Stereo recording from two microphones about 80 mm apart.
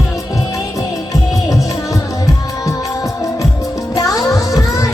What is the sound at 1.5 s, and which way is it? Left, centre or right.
Music, left.